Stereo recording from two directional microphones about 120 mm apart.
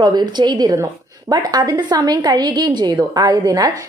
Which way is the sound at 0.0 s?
40° right (ahead or behind).